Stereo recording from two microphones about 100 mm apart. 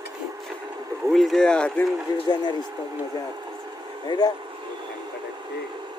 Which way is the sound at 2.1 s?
40° left (ahead or behind).